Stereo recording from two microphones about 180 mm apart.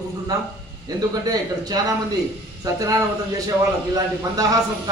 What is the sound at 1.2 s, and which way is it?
Speech, 20° right (ahead or behind).